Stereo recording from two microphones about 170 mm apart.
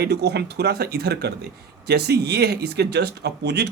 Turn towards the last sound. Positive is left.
turn(degrees=-75)  # may be behind; listen again after turning